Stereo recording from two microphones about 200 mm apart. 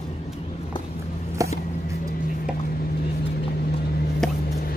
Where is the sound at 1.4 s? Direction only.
15° right (ahead or behind).